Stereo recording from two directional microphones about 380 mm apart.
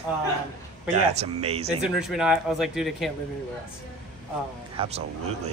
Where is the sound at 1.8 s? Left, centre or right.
Centre.